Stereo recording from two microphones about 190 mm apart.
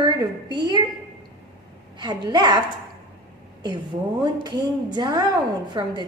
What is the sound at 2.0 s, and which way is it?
Speech, 20° right (ahead or behind).